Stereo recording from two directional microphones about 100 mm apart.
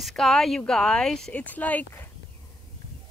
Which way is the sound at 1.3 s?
15° left (ahead or behind).